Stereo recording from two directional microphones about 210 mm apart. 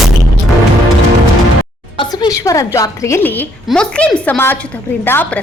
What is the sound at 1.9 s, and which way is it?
A woman's voice, 20° left (ahead or behind).